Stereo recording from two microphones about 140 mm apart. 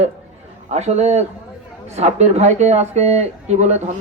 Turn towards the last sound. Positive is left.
turn(degrees=-55)  # may be behind; listen again after turning